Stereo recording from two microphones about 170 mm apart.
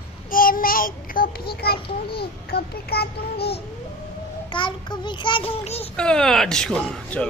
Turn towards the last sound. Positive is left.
turn(degrees=5)  # may be behind; listen again after turning